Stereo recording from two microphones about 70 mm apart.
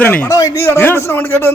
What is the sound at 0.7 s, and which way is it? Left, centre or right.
Speech, left.